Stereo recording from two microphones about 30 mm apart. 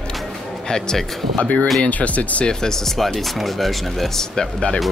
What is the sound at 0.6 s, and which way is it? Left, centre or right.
Speech, left.